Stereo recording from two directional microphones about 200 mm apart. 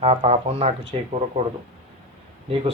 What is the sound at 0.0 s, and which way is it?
Speech, 30° right (ahead or behind).